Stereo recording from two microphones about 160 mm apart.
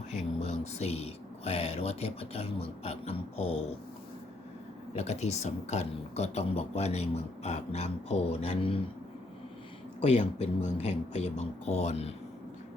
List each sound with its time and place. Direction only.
0.1 s speech: 45° left (ahead or behind)
4.9 s speech: 45° left (ahead or behind)
10.0 s speech: 45° left (ahead or behind)